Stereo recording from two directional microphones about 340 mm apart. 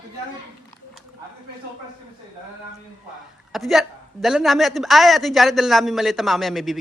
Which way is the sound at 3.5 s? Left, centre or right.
Centre.